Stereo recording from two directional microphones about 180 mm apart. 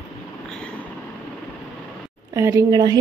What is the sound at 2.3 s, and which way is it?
Speech, 15° right (ahead or behind).